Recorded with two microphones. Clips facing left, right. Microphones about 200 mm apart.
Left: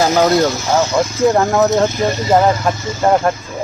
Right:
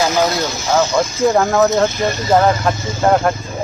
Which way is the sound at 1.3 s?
Centre (ahead or behind).